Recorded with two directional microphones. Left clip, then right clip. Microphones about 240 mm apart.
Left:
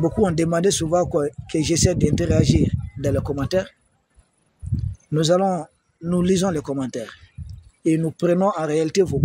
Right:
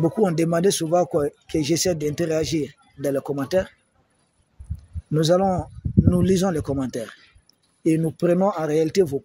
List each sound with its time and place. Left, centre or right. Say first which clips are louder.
0.0 s speech: even; centre
5.1 s speech: even; centre